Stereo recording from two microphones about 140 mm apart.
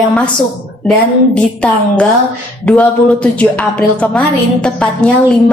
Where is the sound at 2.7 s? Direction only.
10° left (ahead or behind).